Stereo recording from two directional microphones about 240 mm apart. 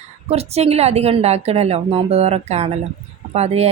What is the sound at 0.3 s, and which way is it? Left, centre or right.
Speech, right.